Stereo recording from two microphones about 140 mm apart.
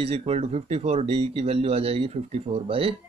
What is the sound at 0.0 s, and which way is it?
Speech, 45° right (ahead or behind).